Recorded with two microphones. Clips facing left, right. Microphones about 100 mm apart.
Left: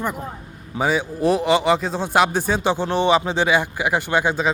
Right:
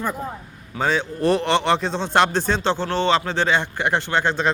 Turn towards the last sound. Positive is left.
turn(degrees=10)  # may be behind; listen again after turning